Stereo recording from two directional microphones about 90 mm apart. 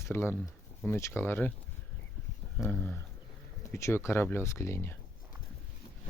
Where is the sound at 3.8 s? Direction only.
30° left (ahead or behind).